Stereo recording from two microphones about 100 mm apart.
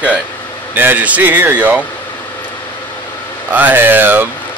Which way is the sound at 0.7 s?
20° right (ahead or behind).